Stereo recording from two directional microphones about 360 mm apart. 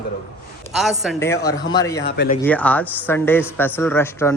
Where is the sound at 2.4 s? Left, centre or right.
Centre.